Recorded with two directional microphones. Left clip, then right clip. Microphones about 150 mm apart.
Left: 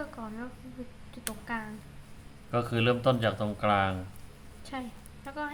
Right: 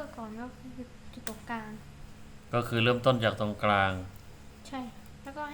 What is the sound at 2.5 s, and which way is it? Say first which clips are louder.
Speech: even; 5° left (ahead or behind).